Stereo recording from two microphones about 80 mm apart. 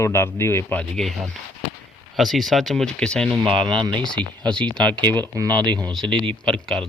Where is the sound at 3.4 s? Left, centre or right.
Right.